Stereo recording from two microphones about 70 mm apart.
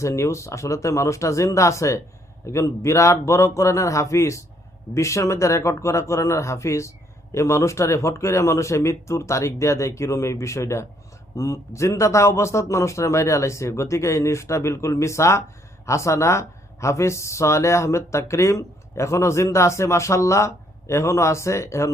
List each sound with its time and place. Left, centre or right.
0.0 s speech: left